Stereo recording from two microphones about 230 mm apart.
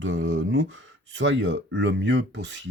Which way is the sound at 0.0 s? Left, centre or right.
Right.